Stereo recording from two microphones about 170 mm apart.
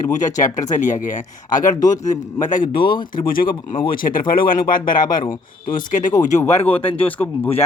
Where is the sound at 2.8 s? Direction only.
25° left (ahead or behind).